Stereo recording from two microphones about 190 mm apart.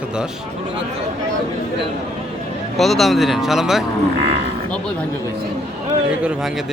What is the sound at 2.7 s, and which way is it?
Speech, centre (ahead or behind).